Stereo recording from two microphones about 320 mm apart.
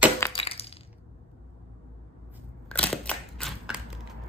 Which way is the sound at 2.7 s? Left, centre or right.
Centre.